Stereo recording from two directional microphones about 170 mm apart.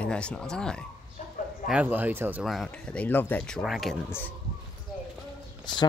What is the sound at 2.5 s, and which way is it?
Speech, 5° left (ahead or behind).